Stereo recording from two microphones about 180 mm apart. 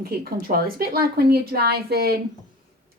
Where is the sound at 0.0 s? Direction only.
60° right (ahead or behind).